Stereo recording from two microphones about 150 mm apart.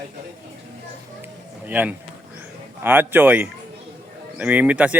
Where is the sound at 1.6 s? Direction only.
10° right (ahead or behind).